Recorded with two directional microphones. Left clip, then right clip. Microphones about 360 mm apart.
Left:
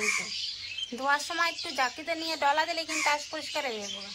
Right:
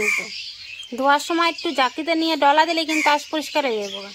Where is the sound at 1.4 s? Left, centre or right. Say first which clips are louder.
Right 9 dB; centre.